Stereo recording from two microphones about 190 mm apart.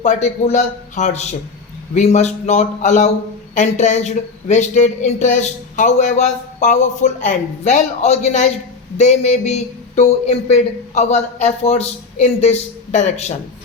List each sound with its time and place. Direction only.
0.0 s speech: 35° left (ahead or behind)